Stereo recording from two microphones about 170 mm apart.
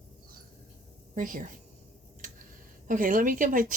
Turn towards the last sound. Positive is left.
turn(degrees=-50)  # may be behind; listen again after turning